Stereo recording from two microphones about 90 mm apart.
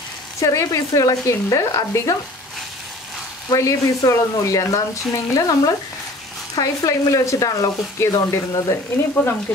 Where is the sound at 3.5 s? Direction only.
40° left (ahead or behind).